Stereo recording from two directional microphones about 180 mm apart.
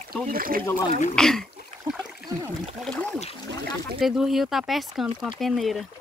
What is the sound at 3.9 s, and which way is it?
Speech, centre (ahead or behind).